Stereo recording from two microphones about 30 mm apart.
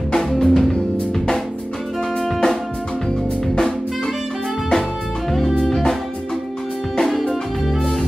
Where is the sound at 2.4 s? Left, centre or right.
Left.